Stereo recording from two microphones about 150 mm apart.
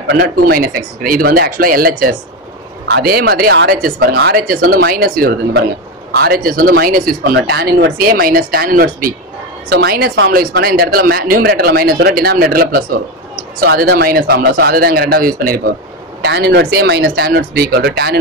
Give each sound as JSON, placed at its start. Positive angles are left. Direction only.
{"t": 0.2, "sound": "speech", "side_deg": -85}
{"t": 9.7, "sound": "speech", "side_deg": -85}
{"t": 16.2, "sound": "speech", "side_deg": -90}